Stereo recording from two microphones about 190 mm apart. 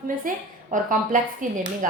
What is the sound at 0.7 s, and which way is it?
A woman's voice, 45° right (ahead or behind).